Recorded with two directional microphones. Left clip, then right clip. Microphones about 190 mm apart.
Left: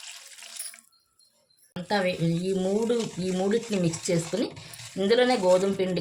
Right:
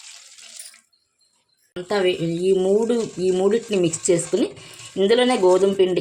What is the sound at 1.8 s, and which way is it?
Speech, 35° right (ahead or behind).